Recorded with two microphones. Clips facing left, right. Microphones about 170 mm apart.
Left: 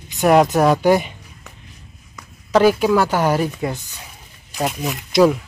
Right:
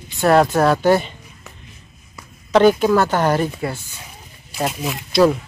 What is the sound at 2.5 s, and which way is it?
Speech, 5° left (ahead or behind).